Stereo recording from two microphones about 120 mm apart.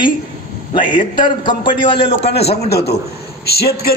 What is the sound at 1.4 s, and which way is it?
A woman's voice, 40° left (ahead or behind).